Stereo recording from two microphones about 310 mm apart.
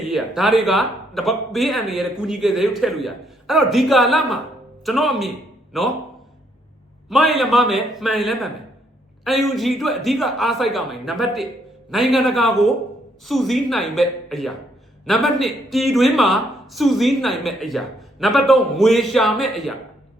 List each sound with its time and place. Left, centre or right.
0.0 s speech: centre
7.1 s speech: centre